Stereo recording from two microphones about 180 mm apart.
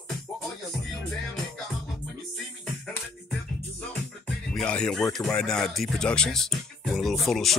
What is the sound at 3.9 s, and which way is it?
Speech, 5° left (ahead or behind).